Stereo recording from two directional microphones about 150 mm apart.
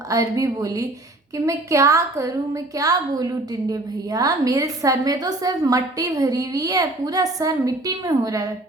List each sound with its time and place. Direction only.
0.1 s a woman's voice: 20° right (ahead or behind)